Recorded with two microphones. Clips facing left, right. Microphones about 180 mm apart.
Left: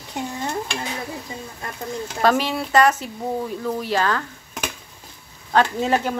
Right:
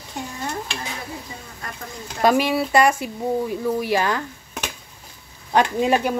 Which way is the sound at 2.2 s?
10° right (ahead or behind).